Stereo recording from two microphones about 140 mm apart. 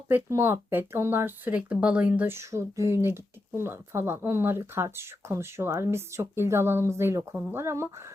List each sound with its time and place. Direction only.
0.1 s speech: 20° right (ahead or behind)